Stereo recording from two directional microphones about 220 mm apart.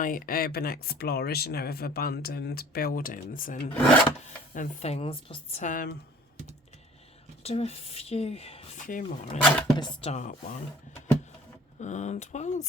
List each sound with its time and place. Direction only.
0.0 s speech: 40° left (ahead or behind)
7.4 s speech: 30° left (ahead or behind)
9.7 s speech: 25° left (ahead or behind)
11.8 s speech: 30° left (ahead or behind)